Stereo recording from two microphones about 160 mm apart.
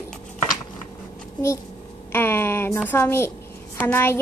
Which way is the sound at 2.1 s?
15° left (ahead or behind).